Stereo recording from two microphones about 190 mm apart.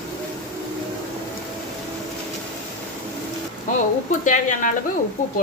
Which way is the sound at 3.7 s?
45° left (ahead or behind).